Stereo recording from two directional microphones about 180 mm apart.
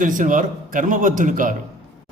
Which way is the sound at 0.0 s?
45° right (ahead or behind).